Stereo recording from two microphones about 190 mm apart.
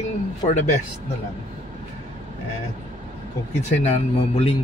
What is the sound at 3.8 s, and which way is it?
Speech, 35° left (ahead or behind).